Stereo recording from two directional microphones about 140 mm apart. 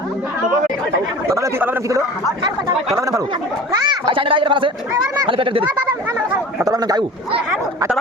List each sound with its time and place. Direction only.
1.4 s speech: 15° right (ahead or behind)
3.8 s speech: 40° right (ahead or behind)
5.9 s chatter: 15° right (ahead or behind)
6.7 s speech: 30° right (ahead or behind)